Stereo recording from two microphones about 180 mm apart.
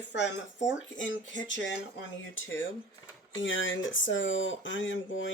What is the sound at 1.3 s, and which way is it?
Speech, 90° left.